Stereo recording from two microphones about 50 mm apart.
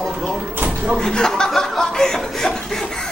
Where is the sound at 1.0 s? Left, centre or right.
Centre.